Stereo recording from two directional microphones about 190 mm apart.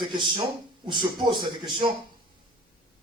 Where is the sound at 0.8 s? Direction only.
25° right (ahead or behind).